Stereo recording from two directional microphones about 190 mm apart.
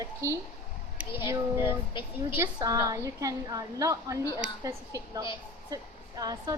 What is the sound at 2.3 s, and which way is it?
A woman's voice, 15° right (ahead or behind).